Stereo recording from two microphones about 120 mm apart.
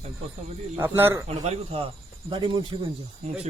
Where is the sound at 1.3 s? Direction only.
65° right (ahead or behind).